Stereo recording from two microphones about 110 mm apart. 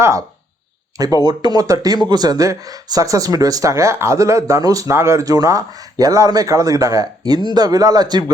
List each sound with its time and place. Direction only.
0.0 s speech: 30° right (ahead or behind)